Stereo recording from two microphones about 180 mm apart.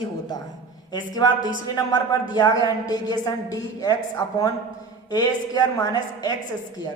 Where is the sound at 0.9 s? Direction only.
25° left (ahead or behind).